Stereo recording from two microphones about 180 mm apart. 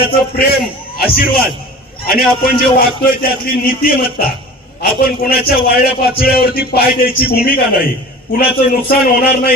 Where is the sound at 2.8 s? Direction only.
55° left (ahead or behind).